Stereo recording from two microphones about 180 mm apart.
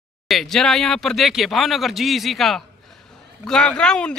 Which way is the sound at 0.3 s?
Centre (ahead or behind).